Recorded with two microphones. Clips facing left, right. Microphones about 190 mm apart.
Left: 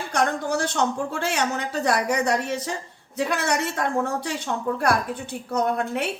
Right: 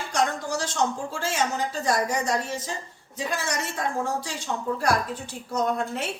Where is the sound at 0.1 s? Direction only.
60° left (ahead or behind).